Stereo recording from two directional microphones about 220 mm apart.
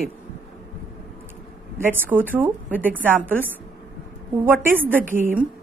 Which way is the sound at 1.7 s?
10° right (ahead or behind).